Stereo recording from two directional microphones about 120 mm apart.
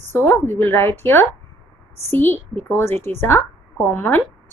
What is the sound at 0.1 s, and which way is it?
A woman's voice, 20° left (ahead or behind).